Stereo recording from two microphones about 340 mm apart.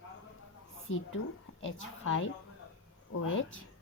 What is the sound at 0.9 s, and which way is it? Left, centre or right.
A woman's voice, left.